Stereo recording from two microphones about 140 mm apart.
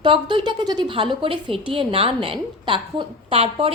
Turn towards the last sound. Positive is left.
turn(degrees=-40)  # may be behind; listen again after turning